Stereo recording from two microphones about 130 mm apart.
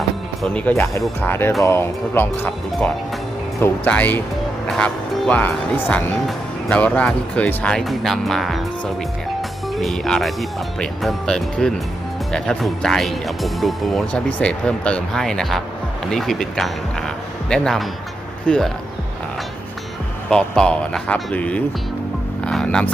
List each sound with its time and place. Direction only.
0.4 s speech: 10° left (ahead or behind)
3.6 s speech: 10° left (ahead or behind)
9.7 s speech: centre (ahead or behind)
20.3 s speech: 5° left (ahead or behind)